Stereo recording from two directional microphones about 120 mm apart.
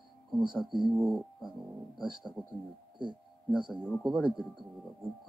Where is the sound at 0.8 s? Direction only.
Centre (ahead or behind).